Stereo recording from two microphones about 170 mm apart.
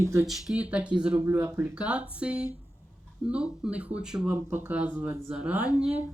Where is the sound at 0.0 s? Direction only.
15° right (ahead or behind).